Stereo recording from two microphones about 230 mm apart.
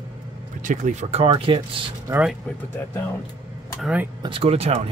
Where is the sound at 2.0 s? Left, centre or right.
Centre.